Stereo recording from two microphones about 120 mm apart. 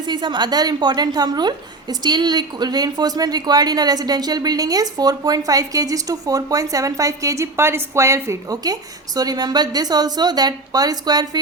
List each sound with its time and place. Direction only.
0.0 s a woman's voice: 40° right (ahead or behind)